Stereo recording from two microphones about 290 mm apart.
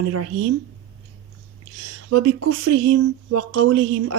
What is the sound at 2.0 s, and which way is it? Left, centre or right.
Speech, right.